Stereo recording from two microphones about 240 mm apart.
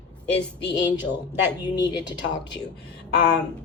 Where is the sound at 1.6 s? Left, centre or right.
Centre.